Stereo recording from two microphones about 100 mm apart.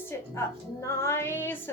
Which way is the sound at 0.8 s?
30° left (ahead or behind).